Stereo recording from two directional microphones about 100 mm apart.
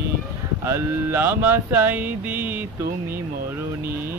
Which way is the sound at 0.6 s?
25° right (ahead or behind).